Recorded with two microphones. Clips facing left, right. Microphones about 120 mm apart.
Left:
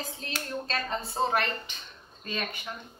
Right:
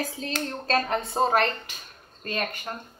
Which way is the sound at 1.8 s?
50° right (ahead or behind).